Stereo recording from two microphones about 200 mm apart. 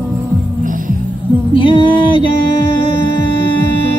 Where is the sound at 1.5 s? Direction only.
25° left (ahead or behind).